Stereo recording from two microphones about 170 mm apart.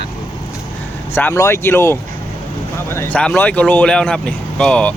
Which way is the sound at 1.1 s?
15° left (ahead or behind).